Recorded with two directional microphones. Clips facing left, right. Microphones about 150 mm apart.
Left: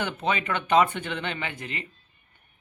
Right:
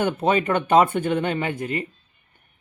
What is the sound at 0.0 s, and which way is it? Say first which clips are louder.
Speech: right 7 dB; 50° right (ahead or behind).